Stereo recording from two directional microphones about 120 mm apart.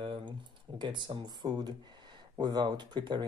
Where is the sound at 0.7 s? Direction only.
40° right (ahead or behind).